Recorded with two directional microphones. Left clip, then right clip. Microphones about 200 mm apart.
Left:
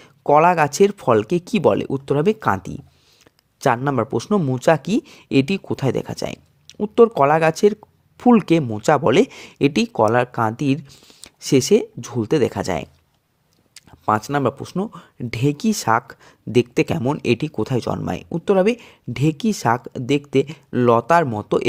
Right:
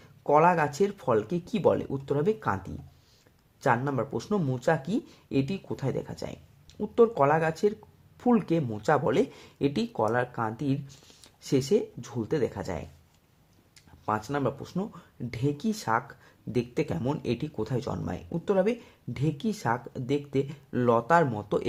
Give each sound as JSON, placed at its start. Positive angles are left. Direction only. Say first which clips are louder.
{"t": 0.0, "sound": "speech", "louder": "left 8 dB", "side_deg": 40}
{"t": 11.2, "sound": "speech", "louder": "left 10 dB", "side_deg": 35}